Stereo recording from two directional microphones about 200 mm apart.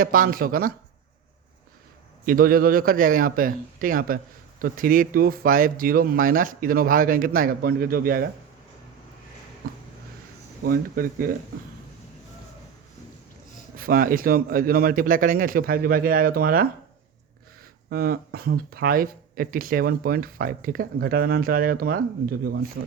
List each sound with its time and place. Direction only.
0.0 s speech: 45° right (ahead or behind)
2.2 s speech: 45° right (ahead or behind)
10.6 s speech: 45° right (ahead or behind)
13.7 s speech: 45° right (ahead or behind)
17.8 s speech: 50° right (ahead or behind)